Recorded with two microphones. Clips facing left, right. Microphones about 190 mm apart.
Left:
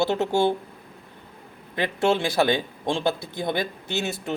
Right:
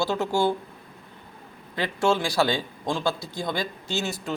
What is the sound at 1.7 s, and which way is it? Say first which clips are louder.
Speech: left 1 dB; 20° left (ahead or behind).